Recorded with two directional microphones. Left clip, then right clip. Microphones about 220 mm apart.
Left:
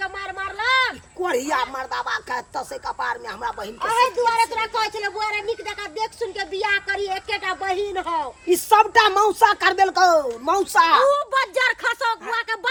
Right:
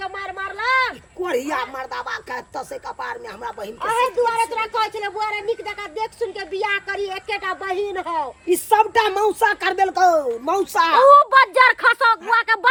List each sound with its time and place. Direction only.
0.0 s speech: centre (ahead or behind)
8.4 s a woman's voice: 10° left (ahead or behind)
11.1 s a woman's voice: 20° right (ahead or behind)